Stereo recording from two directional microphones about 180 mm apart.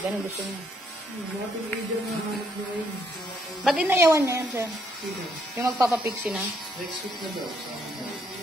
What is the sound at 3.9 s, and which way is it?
Speech, 15° right (ahead or behind).